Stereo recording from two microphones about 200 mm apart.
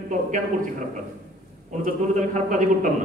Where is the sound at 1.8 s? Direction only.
40° right (ahead or behind).